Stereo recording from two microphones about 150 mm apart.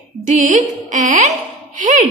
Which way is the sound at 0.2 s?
55° right (ahead or behind).